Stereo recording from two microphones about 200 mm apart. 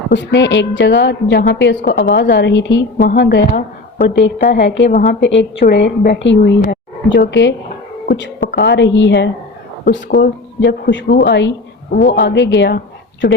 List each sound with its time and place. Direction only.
0.1 s a woman's voice: 60° left (ahead or behind)